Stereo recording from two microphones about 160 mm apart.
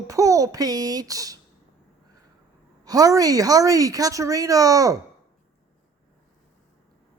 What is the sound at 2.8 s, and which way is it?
A woman's voice, 20° right (ahead or behind).